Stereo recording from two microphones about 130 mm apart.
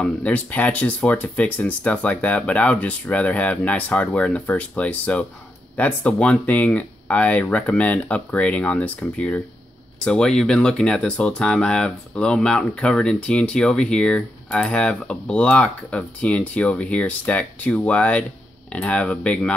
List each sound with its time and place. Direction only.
0.0 s speech: 10° left (ahead or behind)